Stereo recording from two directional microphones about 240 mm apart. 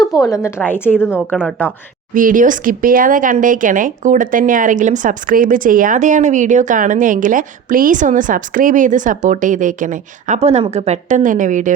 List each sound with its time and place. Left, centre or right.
0.0 s a woman's voice: centre
2.1 s speech: right